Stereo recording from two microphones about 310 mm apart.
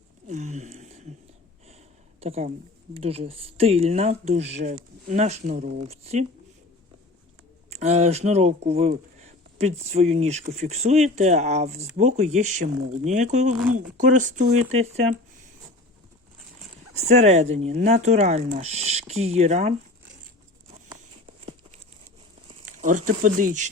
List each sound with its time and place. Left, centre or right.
0.3 s a sound: right
2.2 s speech: centre
7.7 s speech: right
16.9 s speech: right
23.0 s speech: right